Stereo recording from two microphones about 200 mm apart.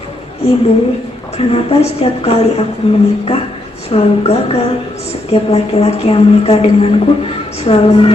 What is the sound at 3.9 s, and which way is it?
A woman's voice, 30° left (ahead or behind).